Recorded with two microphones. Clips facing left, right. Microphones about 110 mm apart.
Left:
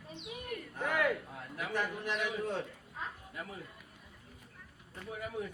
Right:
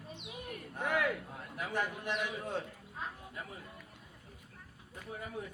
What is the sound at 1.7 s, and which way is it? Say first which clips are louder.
Speech: left 1 dB; 20° right (ahead or behind).